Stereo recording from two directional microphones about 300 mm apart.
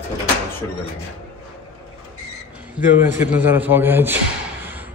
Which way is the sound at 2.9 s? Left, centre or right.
Centre.